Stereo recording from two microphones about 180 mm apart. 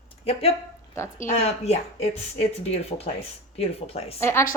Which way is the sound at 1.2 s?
40° left (ahead or behind).